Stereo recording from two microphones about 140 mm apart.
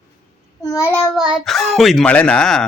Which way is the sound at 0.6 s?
20° left (ahead or behind).